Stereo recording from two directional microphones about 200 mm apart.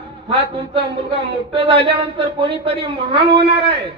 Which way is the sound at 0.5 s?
30° right (ahead or behind).